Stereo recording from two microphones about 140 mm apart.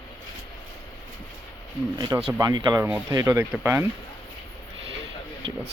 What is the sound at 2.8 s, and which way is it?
Speech, 15° right (ahead or behind).